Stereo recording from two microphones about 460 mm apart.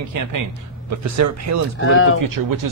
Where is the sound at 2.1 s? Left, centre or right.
Right.